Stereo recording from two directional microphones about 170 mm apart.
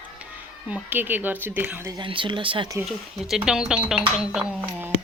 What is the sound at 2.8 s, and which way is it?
Speech, centre (ahead or behind).